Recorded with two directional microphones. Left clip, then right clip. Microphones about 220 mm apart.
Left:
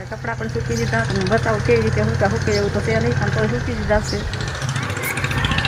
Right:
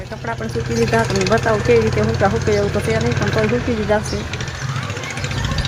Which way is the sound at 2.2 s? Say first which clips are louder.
Right 3 dB; 5° right (ahead or behind).